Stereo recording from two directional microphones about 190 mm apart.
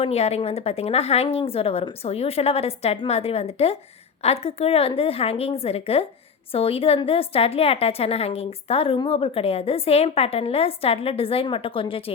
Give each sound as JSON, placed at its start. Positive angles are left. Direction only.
{"t": 0.0, "sound": "a woman's voice", "side_deg": 35}